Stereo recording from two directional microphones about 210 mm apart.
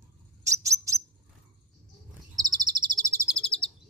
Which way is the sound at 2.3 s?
20° right (ahead or behind).